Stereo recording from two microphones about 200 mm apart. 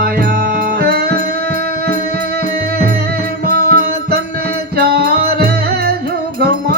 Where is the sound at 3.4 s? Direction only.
50° right (ahead or behind).